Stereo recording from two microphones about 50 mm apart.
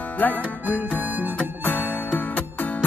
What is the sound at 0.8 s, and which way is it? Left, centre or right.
Music, right.